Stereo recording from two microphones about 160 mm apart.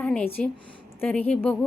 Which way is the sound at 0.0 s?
5° left (ahead or behind).